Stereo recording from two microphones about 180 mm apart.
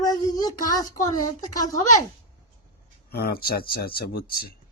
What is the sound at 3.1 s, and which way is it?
A man's voice, 60° left (ahead or behind).